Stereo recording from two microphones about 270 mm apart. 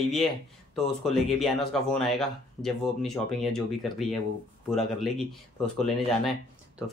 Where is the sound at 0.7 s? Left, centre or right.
Centre.